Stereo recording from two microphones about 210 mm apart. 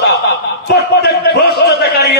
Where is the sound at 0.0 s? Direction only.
50° left (ahead or behind).